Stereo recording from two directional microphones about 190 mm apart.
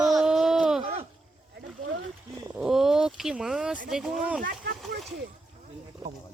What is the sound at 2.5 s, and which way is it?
Speech, centre (ahead or behind).